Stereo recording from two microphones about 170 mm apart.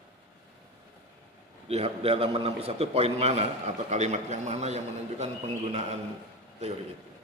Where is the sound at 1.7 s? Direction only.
35° right (ahead or behind).